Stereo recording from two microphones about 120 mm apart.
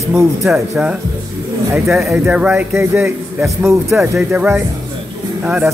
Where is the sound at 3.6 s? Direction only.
25° right (ahead or behind).